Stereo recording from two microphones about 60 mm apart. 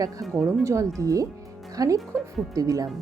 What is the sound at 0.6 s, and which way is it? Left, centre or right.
Speech, right.